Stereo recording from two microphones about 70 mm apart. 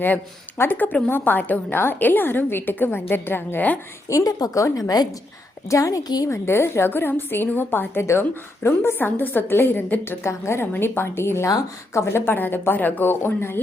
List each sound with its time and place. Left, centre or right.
0.6 s a woman's voice: left
4.1 s a woman's voice: left
6.2 s speech: left
11.4 s speech: left